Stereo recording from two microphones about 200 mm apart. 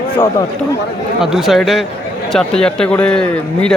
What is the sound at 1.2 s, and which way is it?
A man's voice, centre (ahead or behind).